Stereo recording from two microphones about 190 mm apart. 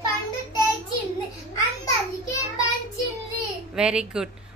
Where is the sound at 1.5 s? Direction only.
15° left (ahead or behind).